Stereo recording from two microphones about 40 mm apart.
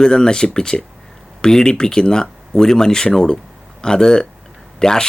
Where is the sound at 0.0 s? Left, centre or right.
Centre.